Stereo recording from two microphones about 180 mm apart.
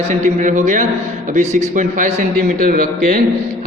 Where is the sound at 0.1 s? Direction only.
45° right (ahead or behind).